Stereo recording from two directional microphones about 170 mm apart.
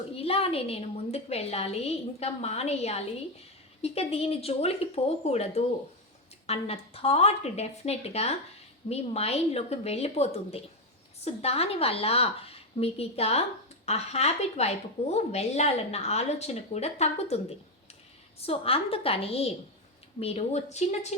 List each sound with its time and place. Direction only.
0.2 s a woman's voice: 35° left (ahead or behind)
18.4 s a woman's voice: 35° left (ahead or behind)